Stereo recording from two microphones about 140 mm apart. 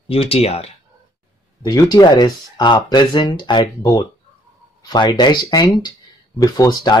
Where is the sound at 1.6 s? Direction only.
30° left (ahead or behind).